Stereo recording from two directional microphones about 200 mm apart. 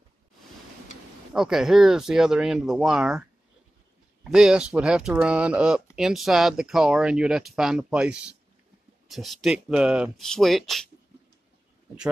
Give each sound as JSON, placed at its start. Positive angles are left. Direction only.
{"t": 1.3, "sound": "speech", "side_deg": 0}